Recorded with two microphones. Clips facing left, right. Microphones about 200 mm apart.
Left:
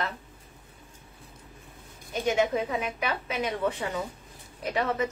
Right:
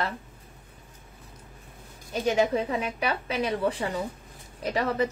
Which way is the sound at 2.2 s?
35° right (ahead or behind).